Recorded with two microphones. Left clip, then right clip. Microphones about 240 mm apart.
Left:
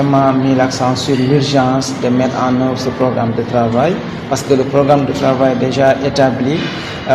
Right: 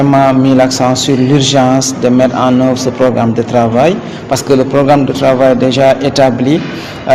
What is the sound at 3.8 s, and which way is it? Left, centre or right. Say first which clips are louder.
Speech: right 4 dB; right.